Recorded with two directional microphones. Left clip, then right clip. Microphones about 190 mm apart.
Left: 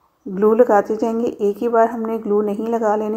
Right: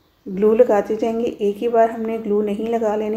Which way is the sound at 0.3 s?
15° left (ahead or behind).